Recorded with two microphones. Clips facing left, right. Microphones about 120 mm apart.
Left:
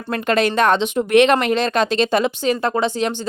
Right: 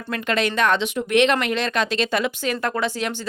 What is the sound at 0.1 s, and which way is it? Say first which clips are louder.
Speech: left 5 dB; 40° left (ahead or behind).